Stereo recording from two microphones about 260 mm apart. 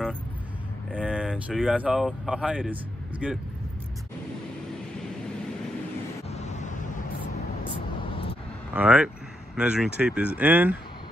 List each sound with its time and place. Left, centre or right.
0.9 s speech: centre
6.2 s vehicle: left
8.7 s speech: centre